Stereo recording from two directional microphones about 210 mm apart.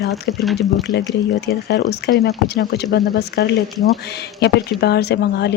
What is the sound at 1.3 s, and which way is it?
Speech, 50° left (ahead or behind).